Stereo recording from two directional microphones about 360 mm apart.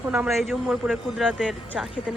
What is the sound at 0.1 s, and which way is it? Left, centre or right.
A man's voice, centre.